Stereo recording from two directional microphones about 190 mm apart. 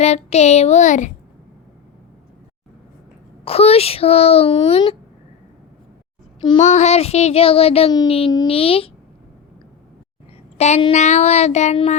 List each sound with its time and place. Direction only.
0.0 s child singing: 35° left (ahead or behind)
3.4 s child singing: 30° left (ahead or behind)
6.6 s child singing: 35° left (ahead or behind)
10.6 s child singing: 30° left (ahead or behind)